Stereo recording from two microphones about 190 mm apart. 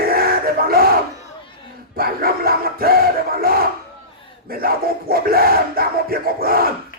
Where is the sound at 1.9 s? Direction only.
50° right (ahead or behind).